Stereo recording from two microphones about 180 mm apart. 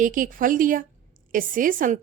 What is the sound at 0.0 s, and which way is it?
A woman's voice, 50° right (ahead or behind).